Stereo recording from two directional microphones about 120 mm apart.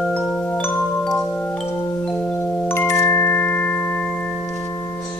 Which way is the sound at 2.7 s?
20° left (ahead or behind).